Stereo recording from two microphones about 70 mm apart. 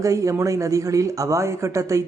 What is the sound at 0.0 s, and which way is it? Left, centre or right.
A man's voice, right.